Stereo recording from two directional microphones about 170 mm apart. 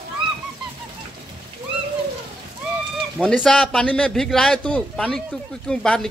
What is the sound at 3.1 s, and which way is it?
A man's voice, 5° left (ahead or behind).